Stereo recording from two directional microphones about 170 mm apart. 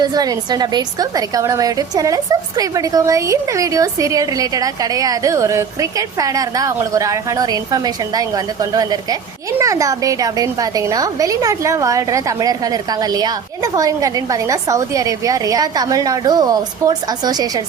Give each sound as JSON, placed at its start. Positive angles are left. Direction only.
{"t": 0.0, "sound": "speech", "side_deg": -25}